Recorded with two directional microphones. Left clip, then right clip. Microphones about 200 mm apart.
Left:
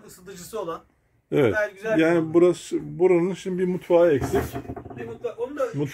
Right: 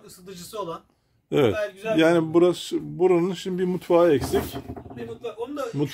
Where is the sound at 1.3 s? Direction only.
10° right (ahead or behind).